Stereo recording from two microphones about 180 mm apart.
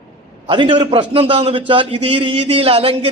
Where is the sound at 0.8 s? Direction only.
30° right (ahead or behind).